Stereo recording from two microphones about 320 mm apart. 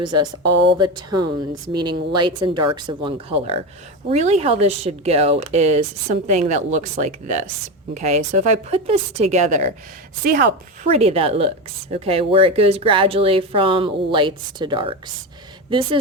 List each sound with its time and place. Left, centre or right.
0.0 s speech: centre
10.9 s speech: centre